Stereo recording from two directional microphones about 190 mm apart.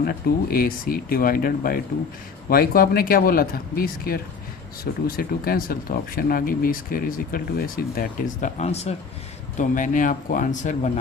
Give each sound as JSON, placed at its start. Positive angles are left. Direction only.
{"t": 0.0, "sound": "speech", "side_deg": 50}